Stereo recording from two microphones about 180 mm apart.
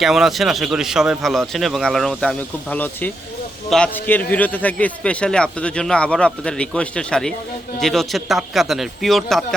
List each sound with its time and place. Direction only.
0.0 s a man's voice: centre (ahead or behind)